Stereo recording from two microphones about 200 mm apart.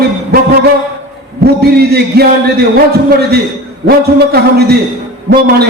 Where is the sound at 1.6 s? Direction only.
50° right (ahead or behind).